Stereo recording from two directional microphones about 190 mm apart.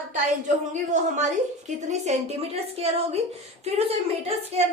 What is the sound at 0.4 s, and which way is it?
A woman's voice, 40° right (ahead or behind).